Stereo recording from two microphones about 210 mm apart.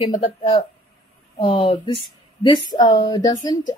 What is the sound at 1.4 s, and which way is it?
A woman's voice, 25° left (ahead or behind).